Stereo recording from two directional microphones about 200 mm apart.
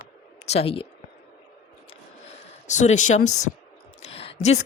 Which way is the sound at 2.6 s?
35° left (ahead or behind).